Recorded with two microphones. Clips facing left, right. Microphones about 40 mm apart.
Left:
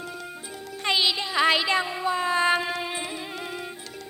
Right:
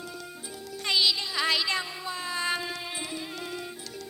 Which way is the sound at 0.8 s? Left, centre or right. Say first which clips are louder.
Left 2 dB; left.